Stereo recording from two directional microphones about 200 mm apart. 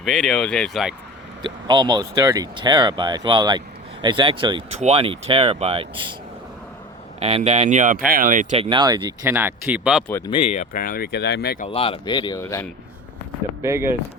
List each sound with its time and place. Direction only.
0.0 s speech: centre (ahead or behind)
1.6 s speech: 20° right (ahead or behind)
7.2 s speech: 30° right (ahead or behind); by 10.0 s 5° right (ahead or behind)
10.1 s speech: 10° left (ahead or behind)
10.3 s speech: 35° left (ahead or behind); by 11.5 s 55° left (ahead or behind)
11.6 s speech: 25° left (ahead or behind)
13.6 s speech: 15° right (ahead or behind)